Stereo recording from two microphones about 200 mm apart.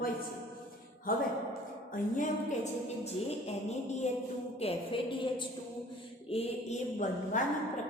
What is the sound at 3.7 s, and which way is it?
A woman's voice, 35° left (ahead or behind).